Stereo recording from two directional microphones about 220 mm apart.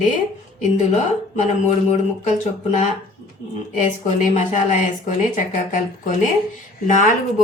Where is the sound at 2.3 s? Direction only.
30° left (ahead or behind).